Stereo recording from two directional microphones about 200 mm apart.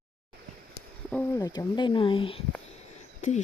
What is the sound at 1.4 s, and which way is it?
Speech, 20° left (ahead or behind).